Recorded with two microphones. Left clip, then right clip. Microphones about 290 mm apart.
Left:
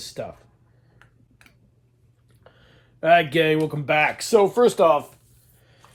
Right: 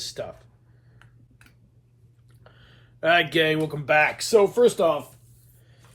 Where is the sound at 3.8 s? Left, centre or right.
Left.